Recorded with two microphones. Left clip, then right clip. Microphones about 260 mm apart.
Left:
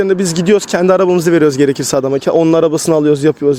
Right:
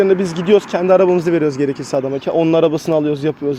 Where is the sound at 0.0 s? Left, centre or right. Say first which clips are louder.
Left 1 dB; left.